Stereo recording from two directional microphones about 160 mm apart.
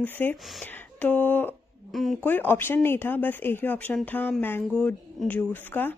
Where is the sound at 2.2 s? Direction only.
10° left (ahead or behind).